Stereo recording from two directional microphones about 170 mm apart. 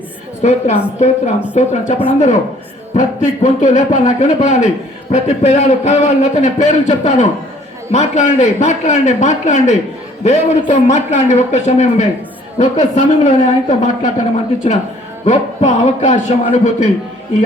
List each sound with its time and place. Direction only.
0.4 s a man's voice: 45° left (ahead or behind)